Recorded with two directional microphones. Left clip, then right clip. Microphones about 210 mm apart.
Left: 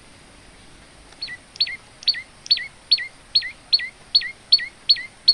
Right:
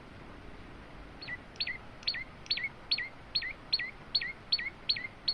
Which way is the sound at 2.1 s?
15° left (ahead or behind).